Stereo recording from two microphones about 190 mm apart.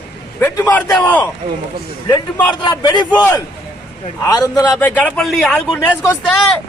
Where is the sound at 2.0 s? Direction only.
20° left (ahead or behind).